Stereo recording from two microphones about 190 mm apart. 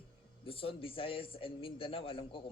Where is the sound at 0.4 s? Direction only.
30° left (ahead or behind).